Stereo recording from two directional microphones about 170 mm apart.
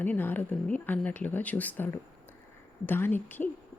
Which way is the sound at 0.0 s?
10° left (ahead or behind).